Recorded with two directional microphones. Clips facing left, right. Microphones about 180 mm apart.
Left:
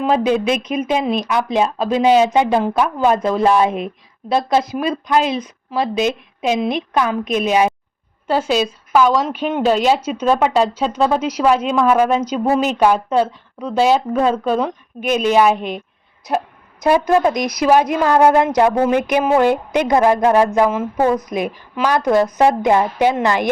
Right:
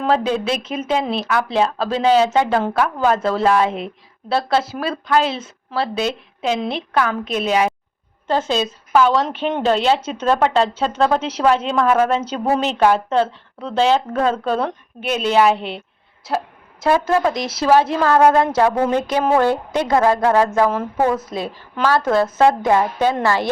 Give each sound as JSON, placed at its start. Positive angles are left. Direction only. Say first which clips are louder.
{"t": 0.0, "sound": "a woman's voice", "louder": "left 3 dB", "side_deg": 15}
{"t": 20.7, "sound": "speech", "louder": "left 2 dB", "side_deg": 5}
{"t": 21.2, "sound": "a woman's voice", "louder": "left 4 dB", "side_deg": 15}